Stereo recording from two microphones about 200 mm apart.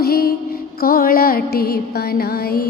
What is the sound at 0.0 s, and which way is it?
Music, 50° left (ahead or behind).